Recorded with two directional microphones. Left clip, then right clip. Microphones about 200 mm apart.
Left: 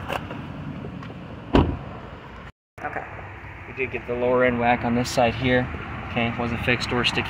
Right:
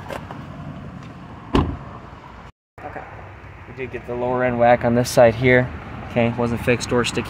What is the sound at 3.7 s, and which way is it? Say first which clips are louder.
Speech: left 1 dB; 55° right (ahead or behind).